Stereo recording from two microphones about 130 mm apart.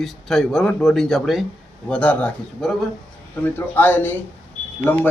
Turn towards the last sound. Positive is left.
turn(degrees=15)  # may be behind; listen again after turning